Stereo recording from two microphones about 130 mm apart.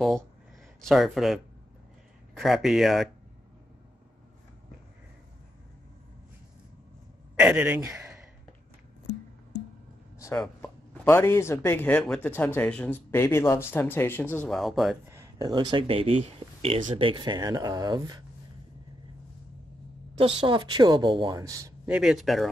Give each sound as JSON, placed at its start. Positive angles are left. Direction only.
{"t": 0.7, "sound": "speech", "side_deg": 0}
{"t": 7.3, "sound": "speech", "side_deg": -10}
{"t": 10.1, "sound": "chopping", "side_deg": 25}
{"t": 10.4, "sound": "speech", "side_deg": 15}
{"t": 14.5, "sound": "speech", "side_deg": 0}
{"t": 15.0, "sound": "a sound", "side_deg": -20}
{"t": 15.4, "sound": "speech", "side_deg": -35}
{"t": 20.2, "sound": "speech", "side_deg": -45}
{"t": 21.4, "sound": "speech", "side_deg": -25}
{"t": 21.8, "sound": "speech", "side_deg": -10}